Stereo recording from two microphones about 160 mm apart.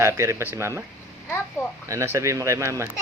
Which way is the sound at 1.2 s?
15° left (ahead or behind).